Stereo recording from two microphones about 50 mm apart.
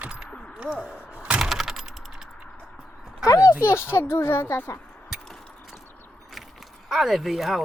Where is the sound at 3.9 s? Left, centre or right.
Left.